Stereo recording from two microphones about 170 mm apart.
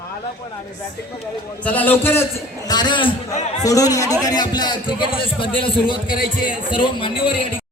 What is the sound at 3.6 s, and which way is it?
A man's voice, 20° left (ahead or behind).